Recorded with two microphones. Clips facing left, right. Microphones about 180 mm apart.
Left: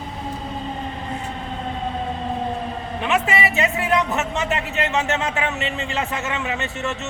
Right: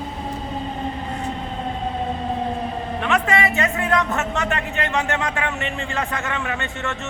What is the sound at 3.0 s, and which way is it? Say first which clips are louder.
A man's voice: right 1 dB; 20° left (ahead or behind).